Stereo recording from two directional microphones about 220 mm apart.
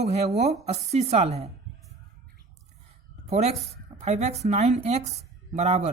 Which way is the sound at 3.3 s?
30° right (ahead or behind).